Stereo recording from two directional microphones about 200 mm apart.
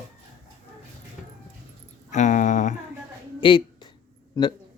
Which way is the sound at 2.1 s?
35° left (ahead or behind).